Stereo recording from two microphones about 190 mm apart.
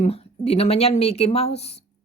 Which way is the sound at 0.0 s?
35° left (ahead or behind).